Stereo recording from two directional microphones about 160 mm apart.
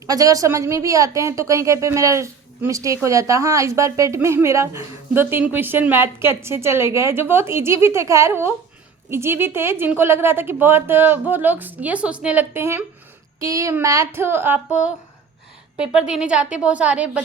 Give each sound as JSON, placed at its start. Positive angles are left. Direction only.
{"t": 0.1, "sound": "a woman's voice", "side_deg": -20}
{"t": 16.0, "sound": "a woman's voice", "side_deg": -5}